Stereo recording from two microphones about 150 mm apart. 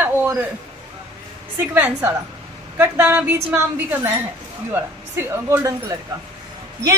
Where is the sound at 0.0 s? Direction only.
15° right (ahead or behind).